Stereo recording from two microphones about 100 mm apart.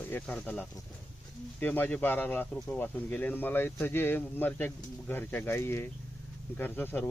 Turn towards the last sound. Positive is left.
turn(degrees=20)  # may be behind; listen again after turning